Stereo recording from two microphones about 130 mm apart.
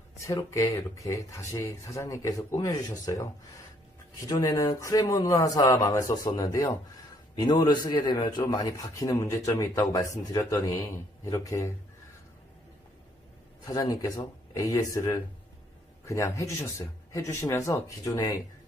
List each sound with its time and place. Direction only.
0.2 s a man's voice: 25° left (ahead or behind)
13.7 s speech: 30° left (ahead or behind)